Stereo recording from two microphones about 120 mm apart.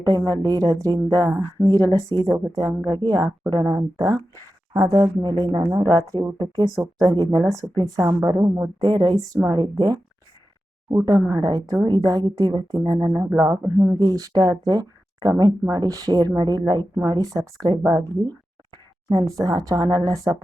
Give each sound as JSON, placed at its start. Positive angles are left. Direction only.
{"t": 0.1, "sound": "speech", "side_deg": -30}
{"t": 2.1, "sound": "a woman's voice", "side_deg": -40}
{"t": 8.8, "sound": "speech", "side_deg": -40}
{"t": 11.0, "sound": "speech", "side_deg": -30}